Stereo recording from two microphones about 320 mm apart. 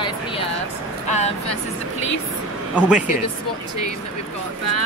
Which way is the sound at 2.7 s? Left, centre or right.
Centre.